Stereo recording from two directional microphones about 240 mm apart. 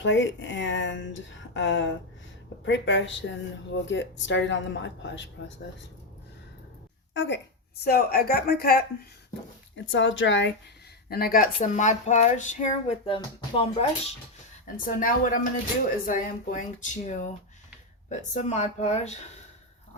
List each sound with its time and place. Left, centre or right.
0.0 s speech: left
7.1 s speech: left
9.7 s speech: left
11.1 s speech: left
14.8 s speech: left